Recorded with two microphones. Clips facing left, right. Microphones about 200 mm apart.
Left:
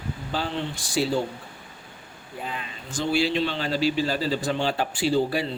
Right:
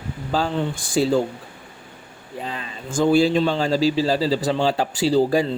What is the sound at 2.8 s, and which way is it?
Speech, 50° right (ahead or behind).